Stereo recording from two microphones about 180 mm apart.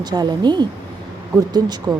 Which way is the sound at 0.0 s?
20° right (ahead or behind).